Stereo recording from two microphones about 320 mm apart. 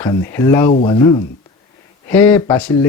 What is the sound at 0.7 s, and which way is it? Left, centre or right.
Speech, left.